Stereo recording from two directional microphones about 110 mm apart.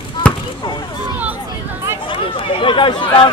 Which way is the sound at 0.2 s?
10° left (ahead or behind).